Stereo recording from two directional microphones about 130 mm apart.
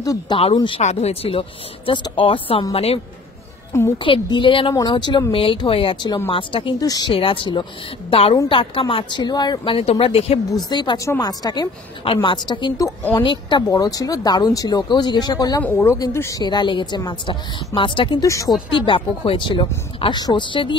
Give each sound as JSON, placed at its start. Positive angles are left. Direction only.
{"t": 0.0, "sound": "speech", "side_deg": 25}
{"t": 0.7, "sound": "speech", "side_deg": 50}
{"t": 4.0, "sound": "speech", "side_deg": 40}
{"t": 6.8, "sound": "speech", "side_deg": 30}
{"t": 7.2, "sound": "speech", "side_deg": 45}
{"t": 9.8, "sound": "speech", "side_deg": 50}
{"t": 10.5, "sound": "speech", "side_deg": 35}
{"t": 12.0, "sound": "speech", "side_deg": 40}
{"t": 13.7, "sound": "speech", "side_deg": 25}
{"t": 15.6, "sound": "speech", "side_deg": 20}
{"t": 16.4, "sound": "speech", "side_deg": 35}
{"t": 18.2, "sound": "speech", "side_deg": 25}
{"t": 18.8, "sound": "speech", "side_deg": 40}